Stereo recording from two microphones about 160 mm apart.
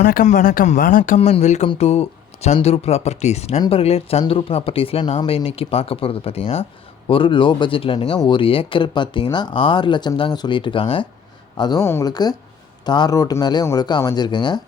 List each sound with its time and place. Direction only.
0.0 s speech: 60° left (ahead or behind); by 14.6 s 30° left (ahead or behind)